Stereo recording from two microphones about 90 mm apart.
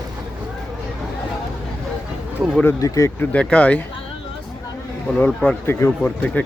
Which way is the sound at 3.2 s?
15° left (ahead or behind).